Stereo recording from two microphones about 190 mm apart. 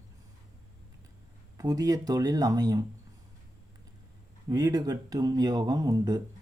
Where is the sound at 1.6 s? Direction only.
20° right (ahead or behind).